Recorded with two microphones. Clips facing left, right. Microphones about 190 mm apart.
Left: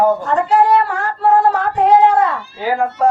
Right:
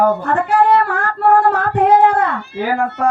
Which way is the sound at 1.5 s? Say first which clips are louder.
Even; 55° right (ahead or behind).